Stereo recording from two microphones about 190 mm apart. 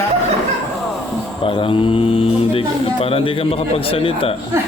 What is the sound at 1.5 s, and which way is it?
Speech, 25° left (ahead or behind).